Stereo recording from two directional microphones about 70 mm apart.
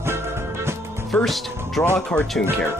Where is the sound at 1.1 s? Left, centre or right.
Centre.